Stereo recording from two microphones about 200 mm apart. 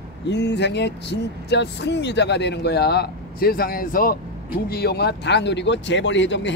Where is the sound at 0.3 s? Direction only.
60° left (ahead or behind).